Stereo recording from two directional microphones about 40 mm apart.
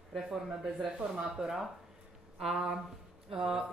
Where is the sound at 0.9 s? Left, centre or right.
Centre.